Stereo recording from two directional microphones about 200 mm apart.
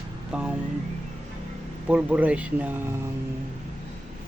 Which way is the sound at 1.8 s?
5° right (ahead or behind).